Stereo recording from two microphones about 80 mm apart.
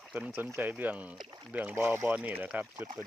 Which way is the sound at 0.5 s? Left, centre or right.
Right.